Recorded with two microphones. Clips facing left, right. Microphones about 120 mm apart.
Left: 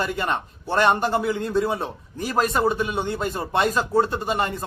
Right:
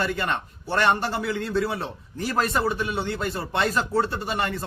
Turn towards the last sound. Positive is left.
turn(degrees=20)  # may be behind; listen again after turning